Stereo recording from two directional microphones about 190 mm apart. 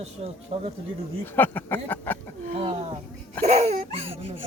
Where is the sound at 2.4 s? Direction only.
30° right (ahead or behind).